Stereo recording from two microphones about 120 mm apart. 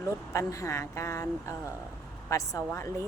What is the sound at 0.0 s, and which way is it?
Speech, 25° left (ahead or behind).